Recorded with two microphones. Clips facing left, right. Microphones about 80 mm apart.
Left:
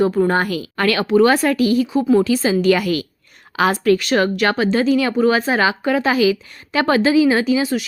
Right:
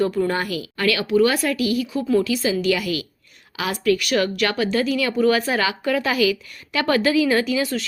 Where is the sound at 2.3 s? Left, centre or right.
Left.